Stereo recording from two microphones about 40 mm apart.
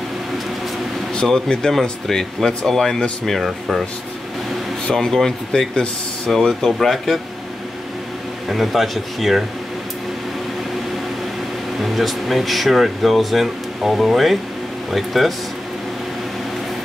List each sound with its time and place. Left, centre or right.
1.2 s speech: centre
4.9 s speech: centre
8.5 s speech: centre
11.8 s speech: centre